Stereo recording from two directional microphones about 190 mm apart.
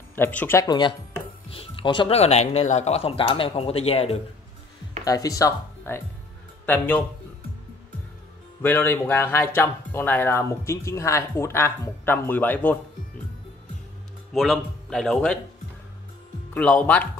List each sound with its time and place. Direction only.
0.1 s speech: 10° left (ahead or behind); by 4.2 s 30° left (ahead or behind)
5.0 s a man's voice: 20° left (ahead or behind)
8.6 s speech: 10° left (ahead or behind)
14.3 s a man's voice: centre (ahead or behind)
16.5 s speech: 10° left (ahead or behind)